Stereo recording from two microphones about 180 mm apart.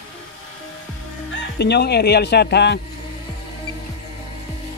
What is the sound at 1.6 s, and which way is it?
Speech, 65° left (ahead or behind).